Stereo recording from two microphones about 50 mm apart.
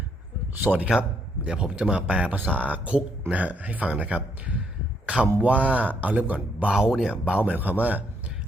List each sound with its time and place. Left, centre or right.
0.6 s speech: right
1.5 s speech: centre
2.3 s speech: right
6.7 s speech: centre; by 8.0 s right